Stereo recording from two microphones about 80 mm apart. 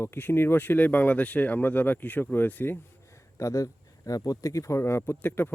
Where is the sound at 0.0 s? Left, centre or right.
Left.